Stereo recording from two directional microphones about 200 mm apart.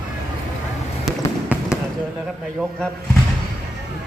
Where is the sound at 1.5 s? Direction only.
10° right (ahead or behind).